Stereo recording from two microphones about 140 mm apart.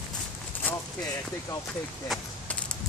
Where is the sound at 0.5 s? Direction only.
10° left (ahead or behind).